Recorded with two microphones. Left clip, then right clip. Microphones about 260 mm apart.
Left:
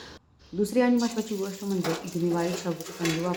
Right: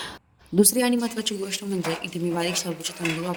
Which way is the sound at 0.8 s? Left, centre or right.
Right.